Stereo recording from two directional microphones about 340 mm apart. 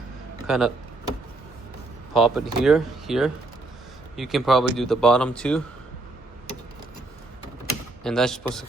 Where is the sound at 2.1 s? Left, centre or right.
Centre.